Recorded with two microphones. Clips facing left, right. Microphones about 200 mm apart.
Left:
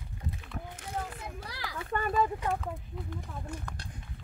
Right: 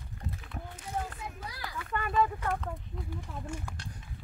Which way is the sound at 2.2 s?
15° left (ahead or behind).